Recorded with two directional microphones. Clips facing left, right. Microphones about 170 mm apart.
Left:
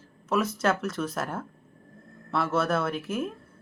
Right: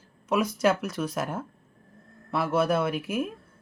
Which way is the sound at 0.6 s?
10° right (ahead or behind).